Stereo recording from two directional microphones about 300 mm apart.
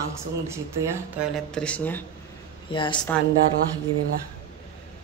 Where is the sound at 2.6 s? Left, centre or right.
Centre.